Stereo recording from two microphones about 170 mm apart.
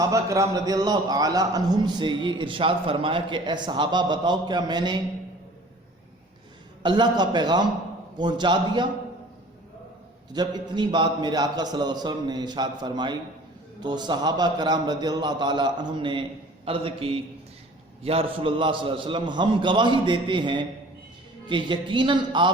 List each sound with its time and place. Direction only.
0.0 s a man's voice: 20° right (ahead or behind)
6.8 s a man's voice: 25° right (ahead or behind)
10.3 s a man's voice: 25° right (ahead or behind)